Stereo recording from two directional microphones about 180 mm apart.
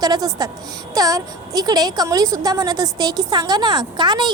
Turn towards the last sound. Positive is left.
turn(degrees=-25)  # may be behind; listen again after turning